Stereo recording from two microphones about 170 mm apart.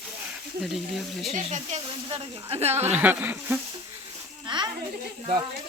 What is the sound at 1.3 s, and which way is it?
Speech, 45° right (ahead or behind).